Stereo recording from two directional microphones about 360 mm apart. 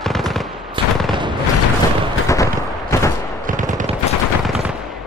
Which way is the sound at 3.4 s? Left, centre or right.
Right.